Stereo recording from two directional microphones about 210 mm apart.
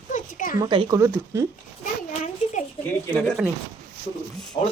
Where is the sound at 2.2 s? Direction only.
35° left (ahead or behind).